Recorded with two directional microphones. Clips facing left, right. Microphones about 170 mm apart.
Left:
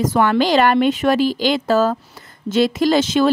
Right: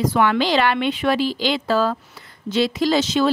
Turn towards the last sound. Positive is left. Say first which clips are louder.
# left 3 dB
turn(degrees=50)  # may be behind; listen again after turning